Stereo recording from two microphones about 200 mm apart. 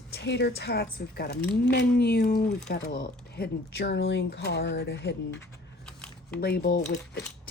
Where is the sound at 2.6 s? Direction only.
60° left (ahead or behind).